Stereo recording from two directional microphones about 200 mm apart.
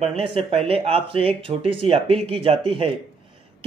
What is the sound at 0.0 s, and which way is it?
Speech, 30° right (ahead or behind).